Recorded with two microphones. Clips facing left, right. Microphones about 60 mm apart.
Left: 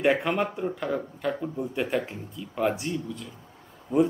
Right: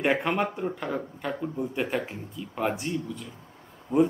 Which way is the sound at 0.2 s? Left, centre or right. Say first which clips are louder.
Even; centre.